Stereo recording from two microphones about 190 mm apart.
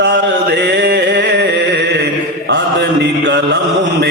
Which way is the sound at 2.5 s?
65° right (ahead or behind).